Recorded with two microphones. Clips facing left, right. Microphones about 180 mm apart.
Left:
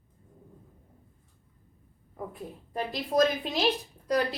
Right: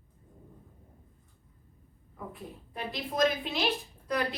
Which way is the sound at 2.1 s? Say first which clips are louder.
Left 4 dB; 40° left (ahead or behind).